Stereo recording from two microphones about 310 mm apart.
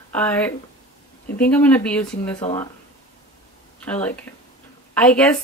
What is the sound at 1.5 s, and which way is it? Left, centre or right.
Speech, centre.